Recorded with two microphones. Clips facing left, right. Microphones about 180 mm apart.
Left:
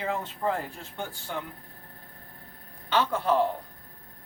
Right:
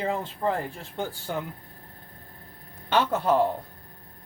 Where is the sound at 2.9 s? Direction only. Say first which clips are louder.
Right 2 dB; 45° right (ahead or behind).